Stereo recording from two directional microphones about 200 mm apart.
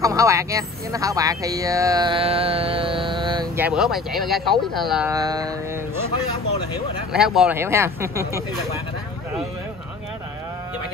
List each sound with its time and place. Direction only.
0.0 s speech: 15° right (ahead or behind)
3.5 s speech: 5° right (ahead or behind)
5.1 s mantra: 20° right (ahead or behind)
7.1 s speech: centre (ahead or behind)